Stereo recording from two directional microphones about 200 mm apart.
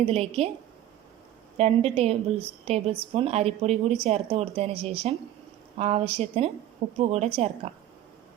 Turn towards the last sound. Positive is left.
turn(degrees=-30)  # may be behind; listen again after turning